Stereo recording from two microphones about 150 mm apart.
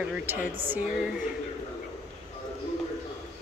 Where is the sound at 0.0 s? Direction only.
10° right (ahead or behind).